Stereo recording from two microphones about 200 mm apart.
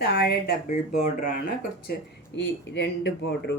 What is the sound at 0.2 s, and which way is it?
Speech, 55° left (ahead or behind).